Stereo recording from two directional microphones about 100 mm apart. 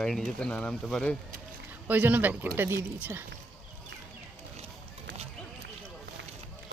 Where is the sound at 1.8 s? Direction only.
15° right (ahead or behind).